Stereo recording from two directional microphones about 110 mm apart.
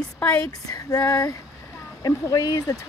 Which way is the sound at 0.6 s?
30° left (ahead or behind).